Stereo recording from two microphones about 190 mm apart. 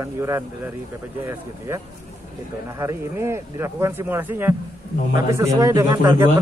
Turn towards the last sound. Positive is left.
turn(degrees=-15)  # may be behind; listen again after turning